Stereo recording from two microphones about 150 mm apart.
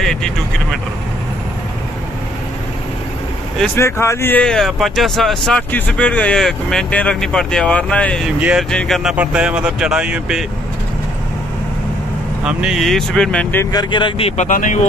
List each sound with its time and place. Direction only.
0.0 s vehicle: 5° left (ahead or behind)
3.7 s speech: 20° left (ahead or behind)
8.4 s speech: 10° right (ahead or behind)
8.6 s speech: 5° left (ahead or behind)
12.4 s speech: 5° right (ahead or behind)
13.7 s speech: 30° left (ahead or behind); by 14.9 s 60° left (ahead or behind)